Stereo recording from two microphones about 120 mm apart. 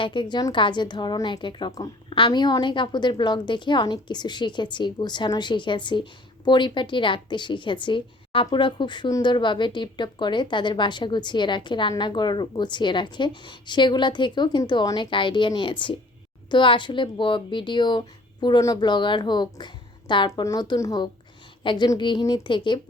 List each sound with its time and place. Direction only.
0.0 s a woman's voice: 40° left (ahead or behind)
21.6 s a woman's voice: 45° left (ahead or behind)